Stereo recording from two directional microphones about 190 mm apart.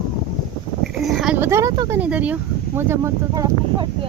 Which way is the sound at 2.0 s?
5° right (ahead or behind).